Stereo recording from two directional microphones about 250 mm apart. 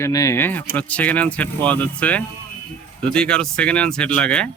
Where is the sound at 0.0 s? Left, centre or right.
Centre.